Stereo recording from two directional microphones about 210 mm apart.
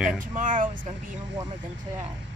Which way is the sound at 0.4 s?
40° right (ahead or behind).